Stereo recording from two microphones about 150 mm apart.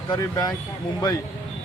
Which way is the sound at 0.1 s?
25° left (ahead or behind).